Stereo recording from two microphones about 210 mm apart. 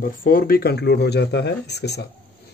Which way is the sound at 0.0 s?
45° left (ahead or behind).